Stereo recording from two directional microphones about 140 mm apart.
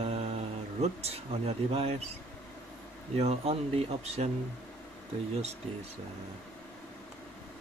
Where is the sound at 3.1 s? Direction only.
50° right (ahead or behind).